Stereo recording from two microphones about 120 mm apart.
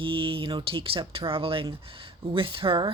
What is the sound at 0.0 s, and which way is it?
Speech, 45° right (ahead or behind).